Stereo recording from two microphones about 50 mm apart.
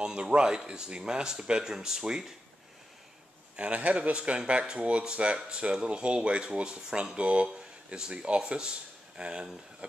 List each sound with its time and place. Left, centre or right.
0.0 s speech: centre
3.5 s speech: right